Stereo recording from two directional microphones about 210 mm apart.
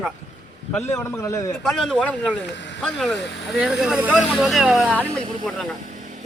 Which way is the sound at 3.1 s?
55° left (ahead or behind).